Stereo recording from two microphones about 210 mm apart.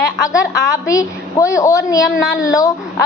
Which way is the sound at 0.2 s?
15° left (ahead or behind).